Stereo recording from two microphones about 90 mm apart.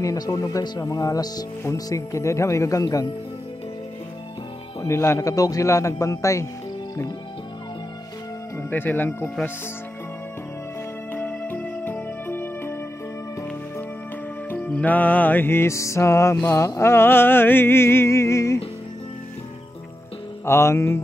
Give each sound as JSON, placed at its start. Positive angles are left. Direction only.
{"t": 0.0, "sound": "speech", "side_deg": 40}
{"t": 4.8, "sound": "speech", "side_deg": 30}
{"t": 5.3, "sound": "speech", "side_deg": 40}
{"t": 8.5, "sound": "music", "side_deg": 20}
{"t": 11.1, "sound": "music", "side_deg": 20}
{"t": 14.5, "sound": "music", "side_deg": 15}
{"t": 20.4, "sound": "speech", "side_deg": 30}